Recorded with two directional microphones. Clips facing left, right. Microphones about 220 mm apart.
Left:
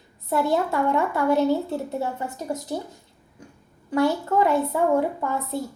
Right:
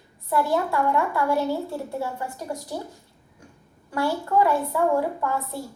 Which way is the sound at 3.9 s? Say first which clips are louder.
Left 2 dB; 20° left (ahead or behind).